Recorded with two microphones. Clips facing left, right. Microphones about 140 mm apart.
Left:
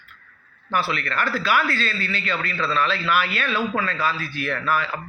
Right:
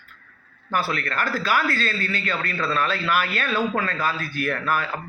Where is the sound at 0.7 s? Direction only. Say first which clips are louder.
Left 1 dB; 45° right (ahead or behind).